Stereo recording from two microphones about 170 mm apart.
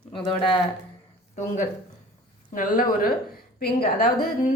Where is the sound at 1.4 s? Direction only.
50° left (ahead or behind).